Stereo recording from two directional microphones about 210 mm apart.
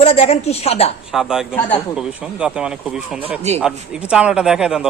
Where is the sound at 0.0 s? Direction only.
30° left (ahead or behind).